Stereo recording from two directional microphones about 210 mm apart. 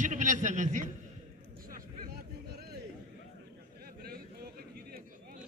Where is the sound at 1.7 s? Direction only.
40° right (ahead or behind).